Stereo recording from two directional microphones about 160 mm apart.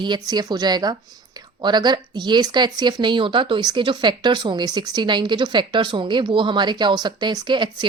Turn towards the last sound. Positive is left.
turn(degrees=-30)  # may be behind; listen again after turning